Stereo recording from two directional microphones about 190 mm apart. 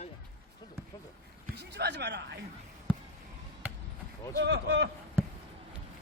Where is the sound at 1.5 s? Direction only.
60° right (ahead or behind).